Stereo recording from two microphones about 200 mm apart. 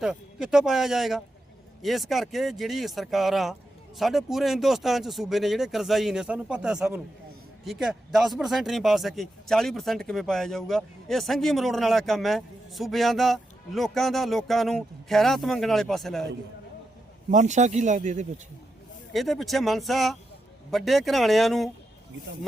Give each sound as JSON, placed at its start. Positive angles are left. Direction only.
{"t": 0.0, "sound": "speech", "side_deg": -5}
{"t": 17.3, "sound": "speech", "side_deg": -35}
{"t": 19.1, "sound": "speech", "side_deg": 0}